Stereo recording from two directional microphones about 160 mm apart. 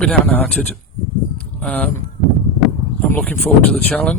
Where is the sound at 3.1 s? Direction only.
10° left (ahead or behind).